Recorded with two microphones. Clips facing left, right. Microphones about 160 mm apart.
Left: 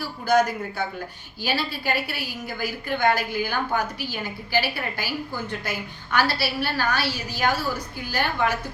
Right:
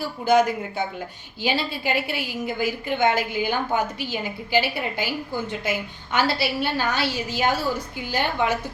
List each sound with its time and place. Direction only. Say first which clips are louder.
0.3 s a woman's voice: right 2 dB; 20° right (ahead or behind)